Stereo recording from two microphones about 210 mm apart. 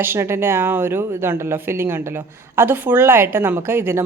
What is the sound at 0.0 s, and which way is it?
Speech, 10° right (ahead or behind).